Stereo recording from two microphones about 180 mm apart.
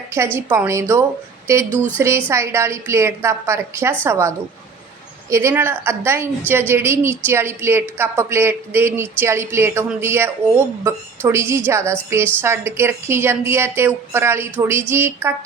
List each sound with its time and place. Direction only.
0.6 s a woman's voice: 15° right (ahead or behind)